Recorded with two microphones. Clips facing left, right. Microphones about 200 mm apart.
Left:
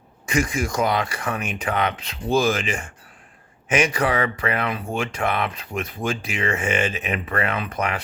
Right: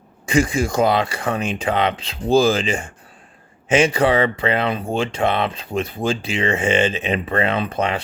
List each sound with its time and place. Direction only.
0.3 s speech: 30° right (ahead or behind)